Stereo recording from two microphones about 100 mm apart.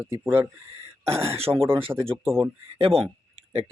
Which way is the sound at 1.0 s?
85° right.